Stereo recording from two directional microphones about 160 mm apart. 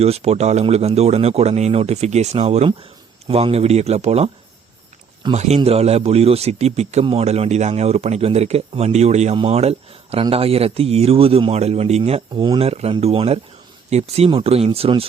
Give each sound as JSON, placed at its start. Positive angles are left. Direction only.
{"t": 0.0, "sound": "a man's voice", "side_deg": -40}
{"t": 5.3, "sound": "a man's voice", "side_deg": -45}
{"t": 12.3, "sound": "a man's voice", "side_deg": -30}